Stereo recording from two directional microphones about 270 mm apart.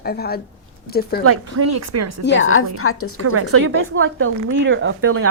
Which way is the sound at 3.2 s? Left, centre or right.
Right.